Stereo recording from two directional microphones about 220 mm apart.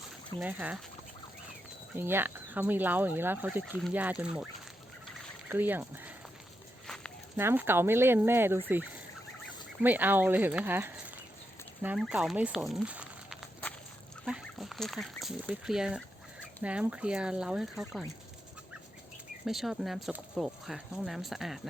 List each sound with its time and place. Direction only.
0.3 s speech: 5° right (ahead or behind)
2.0 s speech: 10° right (ahead or behind)
5.5 s speech: 10° right (ahead or behind)
6.8 s a sound: centre (ahead or behind)
7.3 s speech: 10° right (ahead or behind)
19.5 s speech: centre (ahead or behind)